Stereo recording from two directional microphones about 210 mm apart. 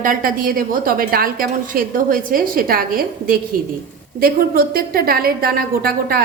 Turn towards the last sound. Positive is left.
turn(degrees=-45)  # may be behind; listen again after turning